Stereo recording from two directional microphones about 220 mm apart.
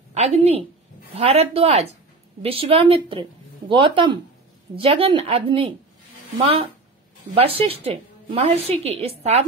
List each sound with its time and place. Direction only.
0.1 s a woman's voice: 30° right (ahead or behind)
7.3 s a woman's voice: 25° right (ahead or behind)